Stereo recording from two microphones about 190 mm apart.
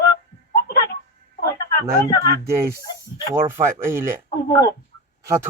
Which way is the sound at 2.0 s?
20° left (ahead or behind).